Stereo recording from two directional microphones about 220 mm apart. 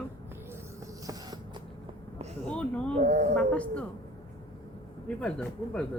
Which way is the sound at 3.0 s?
35° right (ahead or behind).